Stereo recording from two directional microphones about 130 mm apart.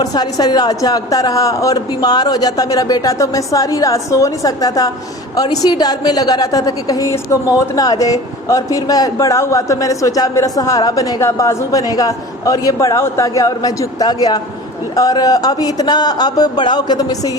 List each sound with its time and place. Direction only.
0.0 s a man's voice: 30° left (ahead or behind)